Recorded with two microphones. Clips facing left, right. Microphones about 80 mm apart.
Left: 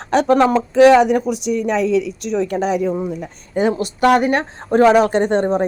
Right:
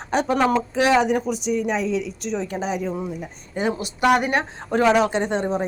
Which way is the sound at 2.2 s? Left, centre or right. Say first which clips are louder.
Left 7 dB; left.